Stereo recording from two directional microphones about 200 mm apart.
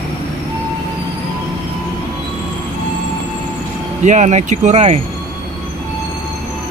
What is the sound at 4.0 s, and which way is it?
Speech, 35° right (ahead or behind).